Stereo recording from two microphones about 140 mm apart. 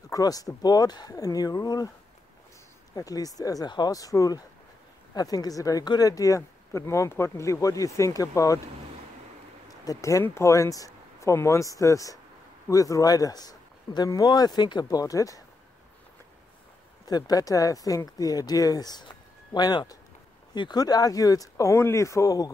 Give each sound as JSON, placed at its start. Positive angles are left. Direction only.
{"t": 0.1, "sound": "speech", "side_deg": 25}
{"t": 2.9, "sound": "speech", "side_deg": 25}
{"t": 9.8, "sound": "speech", "side_deg": 20}
{"t": 17.0, "sound": "speech", "side_deg": 25}